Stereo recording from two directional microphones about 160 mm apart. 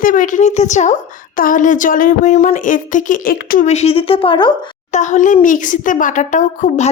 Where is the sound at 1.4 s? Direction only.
55° left (ahead or behind).